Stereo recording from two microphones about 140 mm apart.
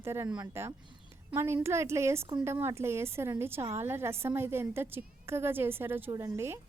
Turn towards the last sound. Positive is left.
turn(degrees=-20)  # may be behind; listen again after turning